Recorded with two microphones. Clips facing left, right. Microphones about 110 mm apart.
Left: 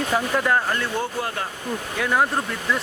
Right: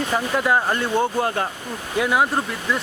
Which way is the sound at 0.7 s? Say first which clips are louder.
Right 4 dB; 20° right (ahead or behind).